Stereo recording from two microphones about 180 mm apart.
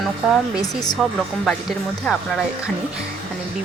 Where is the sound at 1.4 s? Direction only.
Centre (ahead or behind).